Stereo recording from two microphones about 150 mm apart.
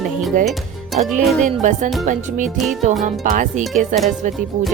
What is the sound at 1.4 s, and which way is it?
Music, 55° right (ahead or behind).